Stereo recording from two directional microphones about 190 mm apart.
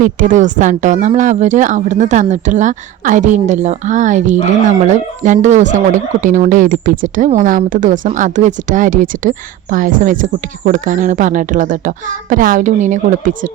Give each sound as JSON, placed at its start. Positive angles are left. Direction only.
{"t": 0.0, "sound": "a woman's voice", "side_deg": -45}